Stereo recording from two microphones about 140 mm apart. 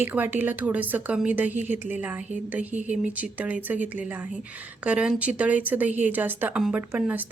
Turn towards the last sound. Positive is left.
turn(degrees=-10)  # may be behind; listen again after turning